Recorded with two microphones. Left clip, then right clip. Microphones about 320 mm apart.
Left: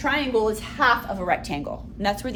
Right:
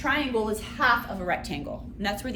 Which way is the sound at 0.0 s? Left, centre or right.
Left.